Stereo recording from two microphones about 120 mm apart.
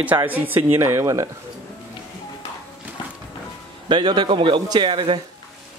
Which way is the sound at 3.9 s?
40° right (ahead or behind).